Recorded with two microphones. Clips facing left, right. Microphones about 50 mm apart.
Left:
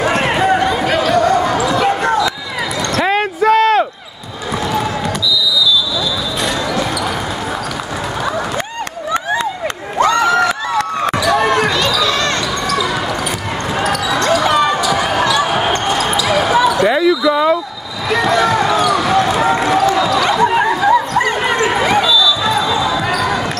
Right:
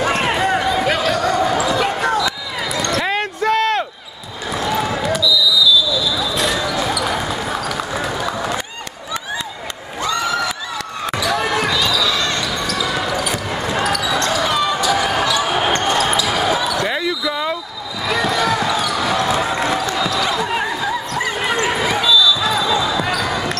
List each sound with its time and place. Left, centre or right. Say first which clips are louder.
0.0 s basketball bounce: left 3 dB; centre
2.9 s a sound: left 7 dB; centre
4.6 s basketball bounce: left 1 dB; centre
9.9 s crowd: left 8 dB; left
10.2 s a sound: left 7 dB; left
11.1 s basketball bounce: left 4 dB; centre
13.7 s basketball bounce: left 3 dB; centre
16.3 s basketball bounce: left 5 dB; centre
20.2 s a sound: left 6 dB; centre
21.2 s basketball bounce: left 5 dB; centre